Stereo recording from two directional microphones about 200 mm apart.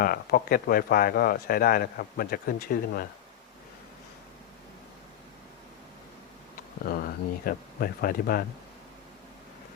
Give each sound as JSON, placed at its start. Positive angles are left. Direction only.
{"t": 0.0, "sound": "speech", "side_deg": 45}
{"t": 6.8, "sound": "a sound", "side_deg": 50}
{"t": 7.4, "sound": "speech", "side_deg": 45}